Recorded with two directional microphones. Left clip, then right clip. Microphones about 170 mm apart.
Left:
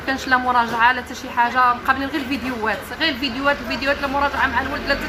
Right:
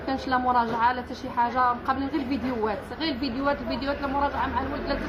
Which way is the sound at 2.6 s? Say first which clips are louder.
Left 12 dB; 10° left (ahead or behind).